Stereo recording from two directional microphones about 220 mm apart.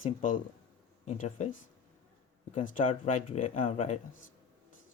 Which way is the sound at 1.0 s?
35° left (ahead or behind).